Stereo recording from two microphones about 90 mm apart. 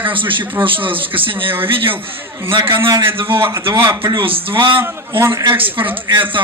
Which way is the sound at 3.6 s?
60° right (ahead or behind).